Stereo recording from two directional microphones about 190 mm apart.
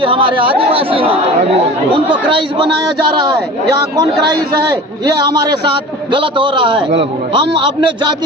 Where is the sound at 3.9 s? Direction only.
20° right (ahead or behind).